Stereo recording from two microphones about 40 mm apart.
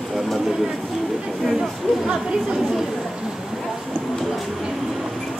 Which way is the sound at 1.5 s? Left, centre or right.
Centre.